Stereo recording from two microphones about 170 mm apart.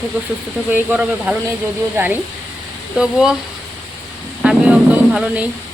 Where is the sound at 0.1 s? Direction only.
10° right (ahead or behind).